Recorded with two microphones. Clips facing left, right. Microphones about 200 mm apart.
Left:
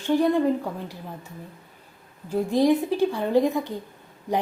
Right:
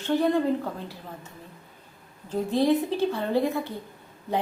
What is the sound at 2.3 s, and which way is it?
A woman's voice, 15° left (ahead or behind).